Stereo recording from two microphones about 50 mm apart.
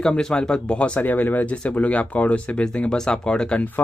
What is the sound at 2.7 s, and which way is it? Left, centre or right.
Speech, centre.